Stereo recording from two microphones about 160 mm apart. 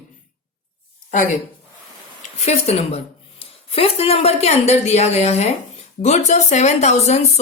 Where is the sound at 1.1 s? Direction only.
50° left (ahead or behind).